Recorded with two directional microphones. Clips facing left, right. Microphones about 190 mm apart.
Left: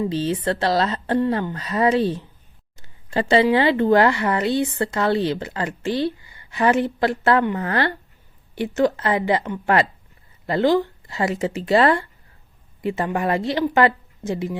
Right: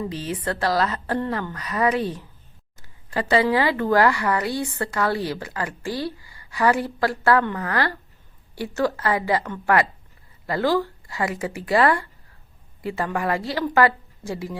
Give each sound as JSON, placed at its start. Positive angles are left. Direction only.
{"t": 0.1, "sound": "a woman's voice", "side_deg": 30}